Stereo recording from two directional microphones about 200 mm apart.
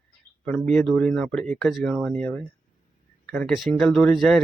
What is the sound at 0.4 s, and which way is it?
Speech, 5° left (ahead or behind).